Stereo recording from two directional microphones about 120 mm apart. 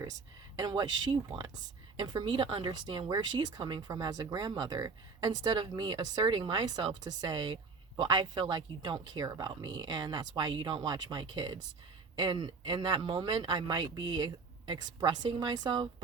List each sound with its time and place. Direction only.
0.5 s speech: 35° right (ahead or behind)